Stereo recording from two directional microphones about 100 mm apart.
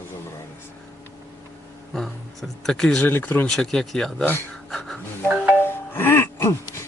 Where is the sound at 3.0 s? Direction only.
20° left (ahead or behind).